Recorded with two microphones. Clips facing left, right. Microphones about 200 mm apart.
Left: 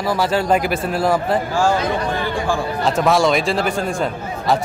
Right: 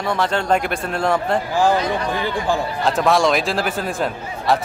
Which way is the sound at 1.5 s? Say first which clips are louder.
Right 2 dB; 15° right (ahead or behind).